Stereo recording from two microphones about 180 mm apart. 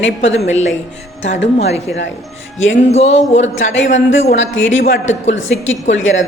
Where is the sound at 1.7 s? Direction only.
35° left (ahead or behind).